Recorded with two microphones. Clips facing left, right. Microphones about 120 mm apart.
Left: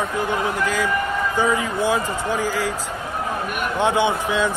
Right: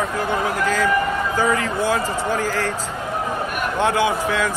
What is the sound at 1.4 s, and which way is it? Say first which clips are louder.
Speech: even; 20° left (ahead or behind).